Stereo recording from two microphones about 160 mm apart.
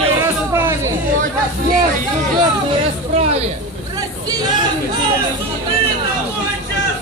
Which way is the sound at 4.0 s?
25° right (ahead or behind).